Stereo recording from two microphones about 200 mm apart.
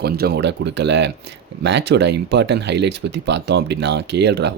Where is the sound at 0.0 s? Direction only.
55° right (ahead or behind).